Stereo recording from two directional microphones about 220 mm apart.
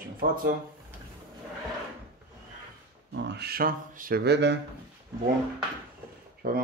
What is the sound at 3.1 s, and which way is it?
Speech, 50° right (ahead or behind).